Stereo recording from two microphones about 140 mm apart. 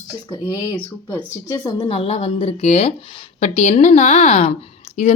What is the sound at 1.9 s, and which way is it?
A woman's voice, 45° left (ahead or behind).